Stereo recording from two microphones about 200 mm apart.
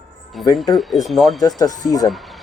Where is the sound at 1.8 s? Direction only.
20° left (ahead or behind).